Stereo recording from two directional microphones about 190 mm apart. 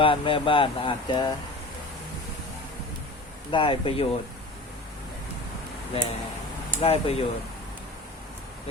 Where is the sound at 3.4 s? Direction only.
25° left (ahead or behind).